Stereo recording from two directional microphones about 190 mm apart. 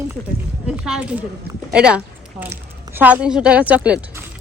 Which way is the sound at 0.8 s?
5° right (ahead or behind).